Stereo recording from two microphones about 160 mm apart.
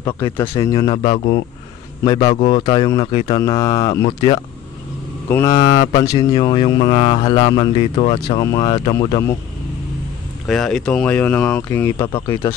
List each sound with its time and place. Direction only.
0.0 s speech: 20° left (ahead or behind)
2.3 s speech: 45° left (ahead or behind)
2.6 s speech: 30° left (ahead or behind)
10.4 s speech: centre (ahead or behind)